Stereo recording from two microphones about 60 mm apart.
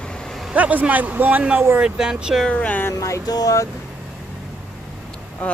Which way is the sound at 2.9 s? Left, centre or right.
Left.